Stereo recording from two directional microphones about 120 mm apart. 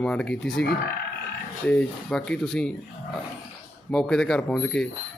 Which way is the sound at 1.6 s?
10° left (ahead or behind).